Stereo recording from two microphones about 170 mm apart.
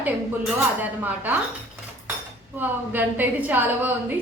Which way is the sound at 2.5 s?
10° right (ahead or behind).